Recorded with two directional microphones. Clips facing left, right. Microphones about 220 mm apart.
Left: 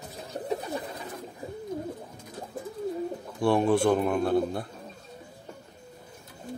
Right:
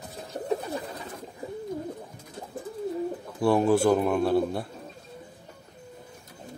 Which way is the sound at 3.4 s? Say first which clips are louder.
Right 1 dB; 5° right (ahead or behind).